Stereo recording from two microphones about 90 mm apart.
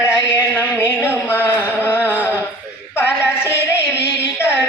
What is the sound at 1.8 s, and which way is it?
Carnatic music, 25° left (ahead or behind).